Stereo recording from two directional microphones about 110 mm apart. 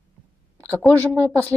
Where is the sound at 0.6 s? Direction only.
15° left (ahead or behind).